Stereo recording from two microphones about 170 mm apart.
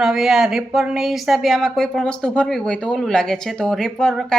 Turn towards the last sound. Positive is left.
turn(degrees=5)  # may be behind; listen again after turning